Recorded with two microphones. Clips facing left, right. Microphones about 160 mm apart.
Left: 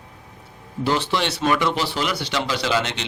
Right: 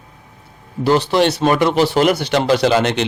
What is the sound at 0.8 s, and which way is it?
A man's voice, 40° right (ahead or behind).